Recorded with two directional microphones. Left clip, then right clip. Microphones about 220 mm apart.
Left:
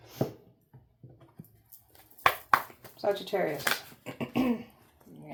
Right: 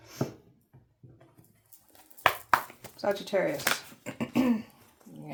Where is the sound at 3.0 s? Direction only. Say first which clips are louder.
Right 1 dB; 35° right (ahead or behind).